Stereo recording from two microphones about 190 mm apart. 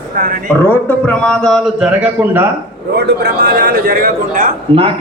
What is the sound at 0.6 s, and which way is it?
A man's voice, 5° left (ahead or behind).